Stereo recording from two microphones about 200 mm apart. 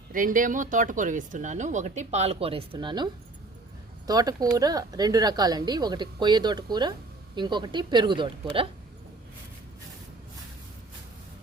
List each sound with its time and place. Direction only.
0.1 s speech: 45° right (ahead or behind); by 8.6 s 25° right (ahead or behind)